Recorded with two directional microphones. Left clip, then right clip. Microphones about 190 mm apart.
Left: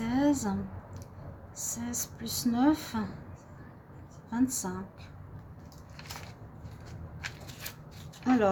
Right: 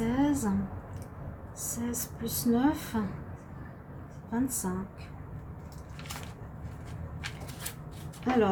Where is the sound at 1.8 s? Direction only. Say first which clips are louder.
Right 1 dB; 60° left (ahead or behind).